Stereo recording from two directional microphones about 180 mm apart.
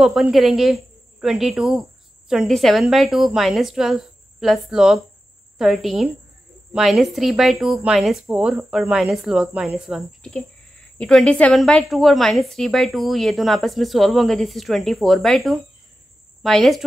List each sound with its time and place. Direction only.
0.0 s a woman's voice: 5° right (ahead or behind)